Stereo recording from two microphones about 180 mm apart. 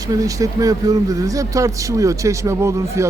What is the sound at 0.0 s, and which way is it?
A man's voice, 20° right (ahead or behind).